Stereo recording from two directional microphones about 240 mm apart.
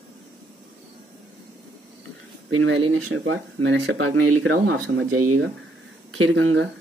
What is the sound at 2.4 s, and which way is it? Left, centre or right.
Speech, right.